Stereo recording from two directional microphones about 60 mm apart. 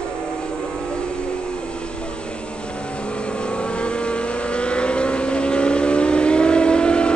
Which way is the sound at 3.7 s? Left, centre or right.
Centre.